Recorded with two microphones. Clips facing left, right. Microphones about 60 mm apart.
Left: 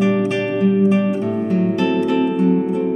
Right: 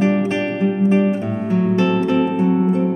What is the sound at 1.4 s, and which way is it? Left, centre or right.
Music, centre.